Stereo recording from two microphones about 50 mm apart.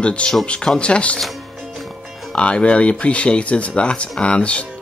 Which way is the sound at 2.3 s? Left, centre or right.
Left.